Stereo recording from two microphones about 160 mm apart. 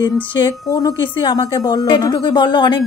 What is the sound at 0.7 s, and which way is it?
A woman's voice, 25° left (ahead or behind).